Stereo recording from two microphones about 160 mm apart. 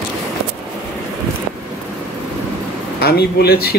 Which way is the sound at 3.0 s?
90° left.